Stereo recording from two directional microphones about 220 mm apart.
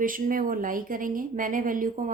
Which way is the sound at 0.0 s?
40° right (ahead or behind).